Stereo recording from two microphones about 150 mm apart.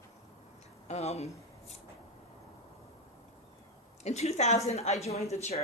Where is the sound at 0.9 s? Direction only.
45° left (ahead or behind).